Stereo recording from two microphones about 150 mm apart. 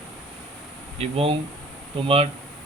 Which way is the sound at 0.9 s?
40° right (ahead or behind).